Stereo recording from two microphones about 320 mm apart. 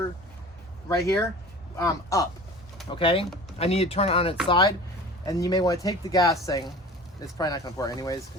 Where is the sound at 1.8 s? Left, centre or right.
Centre.